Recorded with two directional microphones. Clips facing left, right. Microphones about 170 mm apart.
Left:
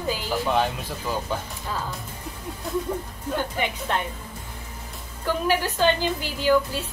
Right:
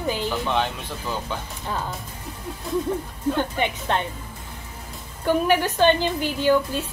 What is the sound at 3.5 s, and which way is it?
Speech, 20° right (ahead or behind).